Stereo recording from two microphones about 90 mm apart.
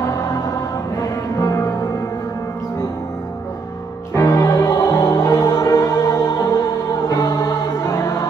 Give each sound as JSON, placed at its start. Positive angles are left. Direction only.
{"t": 1.0, "sound": "music", "side_deg": 35}
{"t": 4.1, "sound": "music", "side_deg": 35}